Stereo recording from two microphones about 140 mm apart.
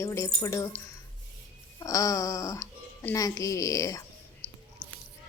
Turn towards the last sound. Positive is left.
turn(degrees=25)  # may be behind; listen again after turning